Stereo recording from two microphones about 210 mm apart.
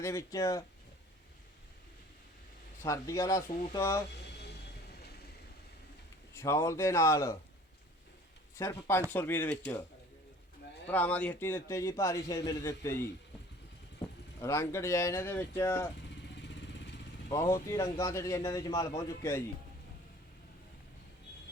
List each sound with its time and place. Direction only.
0.0 s a man's voice: 15° left (ahead or behind)
2.8 s a man's voice: 15° left (ahead or behind)
4.4 s vehicle: 50° left (ahead or behind)
6.3 s a man's voice: 15° left (ahead or behind)
8.5 s a man's voice: 10° left (ahead or behind)
10.8 s a man's voice: 10° left (ahead or behind)
14.4 s a man's voice: 15° left (ahead or behind)
16.3 s vehicle: 55° left (ahead or behind)
17.3 s a man's voice: 15° left (ahead or behind)
18.7 s a man's voice: 25° left (ahead or behind)
18.9 s a man's voice: 10° left (ahead or behind)